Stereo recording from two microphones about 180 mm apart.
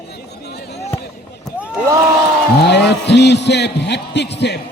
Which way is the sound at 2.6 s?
70° left (ahead or behind).